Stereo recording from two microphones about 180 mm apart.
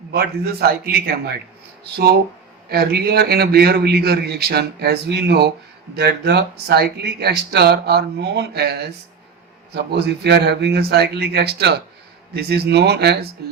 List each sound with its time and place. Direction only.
0.1 s speech: 60° right (ahead or behind)
2.6 s speech: 60° right (ahead or behind)